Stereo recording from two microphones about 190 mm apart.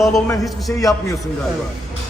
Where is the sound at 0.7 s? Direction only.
15° left (ahead or behind).